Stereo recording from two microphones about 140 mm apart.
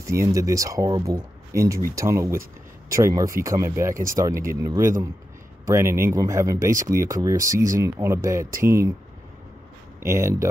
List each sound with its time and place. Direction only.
0.0 s speech: 20° right (ahead or behind)
10.0 s speech: 20° right (ahead or behind)